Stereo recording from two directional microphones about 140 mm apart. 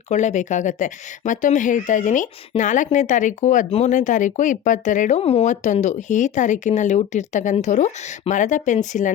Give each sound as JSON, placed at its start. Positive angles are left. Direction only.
{"t": 0.1, "sound": "speech", "side_deg": 60}